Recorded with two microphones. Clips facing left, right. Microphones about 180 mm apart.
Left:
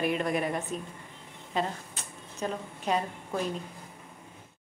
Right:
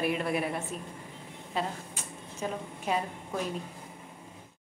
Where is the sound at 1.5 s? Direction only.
10° right (ahead or behind).